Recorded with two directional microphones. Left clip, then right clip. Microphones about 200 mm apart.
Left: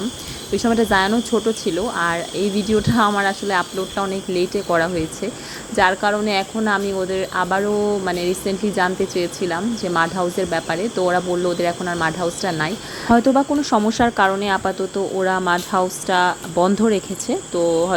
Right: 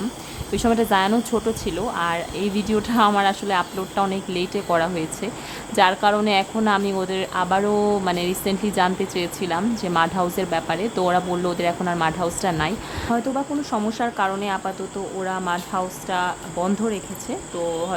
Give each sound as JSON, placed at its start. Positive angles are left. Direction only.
{"t": 0.5, "sound": "speech", "side_deg": 5}
{"t": 13.1, "sound": "speech", "side_deg": 30}